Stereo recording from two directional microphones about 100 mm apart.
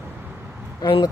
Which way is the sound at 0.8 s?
55° left (ahead or behind).